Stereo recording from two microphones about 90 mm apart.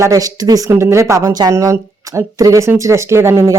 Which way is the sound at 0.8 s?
30° right (ahead or behind).